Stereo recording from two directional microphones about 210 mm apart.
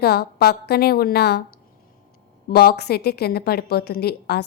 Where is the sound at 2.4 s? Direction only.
45° left (ahead or behind).